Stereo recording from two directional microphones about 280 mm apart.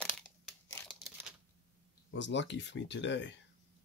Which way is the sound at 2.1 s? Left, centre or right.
Left.